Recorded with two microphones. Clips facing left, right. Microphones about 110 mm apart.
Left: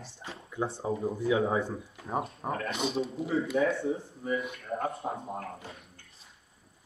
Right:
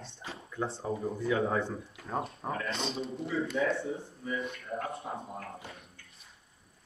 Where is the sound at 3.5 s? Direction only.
45° left (ahead or behind).